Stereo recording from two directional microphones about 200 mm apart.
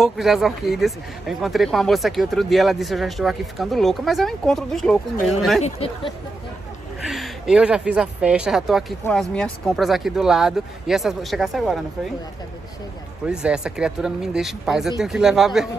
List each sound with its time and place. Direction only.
0.0 s speech: centre (ahead or behind)
5.6 s speech: 30° left (ahead or behind)
7.1 s speech: centre (ahead or behind)
13.3 s speech: 5° right (ahead or behind)